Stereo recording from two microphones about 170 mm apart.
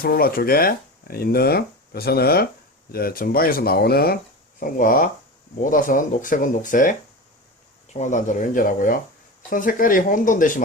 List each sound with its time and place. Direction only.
0.0 s speech: 60° left (ahead or behind)
4.6 s speech: 55° left (ahead or behind)
7.9 s speech: 45° left (ahead or behind)